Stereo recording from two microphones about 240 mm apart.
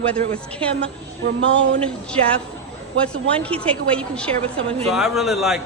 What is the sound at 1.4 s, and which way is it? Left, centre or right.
Speech, right.